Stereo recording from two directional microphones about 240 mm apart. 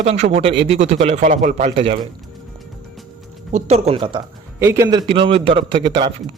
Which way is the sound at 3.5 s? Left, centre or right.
Right.